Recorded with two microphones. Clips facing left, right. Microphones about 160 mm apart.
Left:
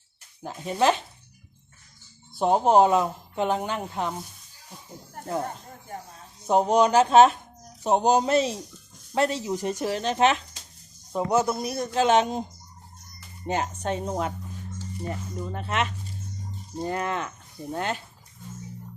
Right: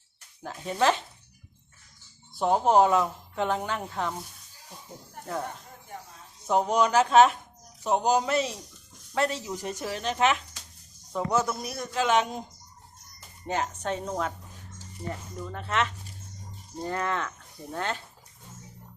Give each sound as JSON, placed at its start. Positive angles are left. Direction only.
{"t": 0.4, "sound": "speech", "side_deg": 15}
{"t": 2.4, "sound": "speech", "side_deg": 20}
{"t": 5.4, "sound": "speech", "side_deg": 40}
{"t": 6.5, "sound": "speech", "side_deg": 25}
{"t": 13.5, "sound": "speech", "side_deg": 20}
{"t": 15.4, "sound": "speech", "side_deg": 20}